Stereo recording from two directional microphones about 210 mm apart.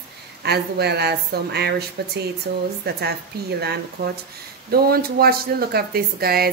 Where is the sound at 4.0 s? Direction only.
50° right (ahead or behind).